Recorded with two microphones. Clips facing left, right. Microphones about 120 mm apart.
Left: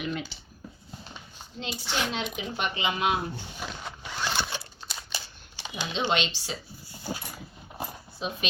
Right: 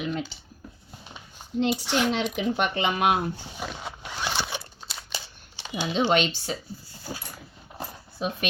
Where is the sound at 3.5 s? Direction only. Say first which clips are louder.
Right 3 dB; 5° right (ahead or behind).